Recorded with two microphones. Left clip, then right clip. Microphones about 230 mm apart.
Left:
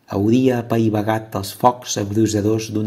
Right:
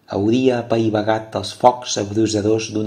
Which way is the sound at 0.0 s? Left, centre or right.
Left.